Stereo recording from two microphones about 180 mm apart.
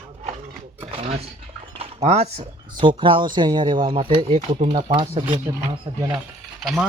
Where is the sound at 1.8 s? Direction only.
35° right (ahead or behind).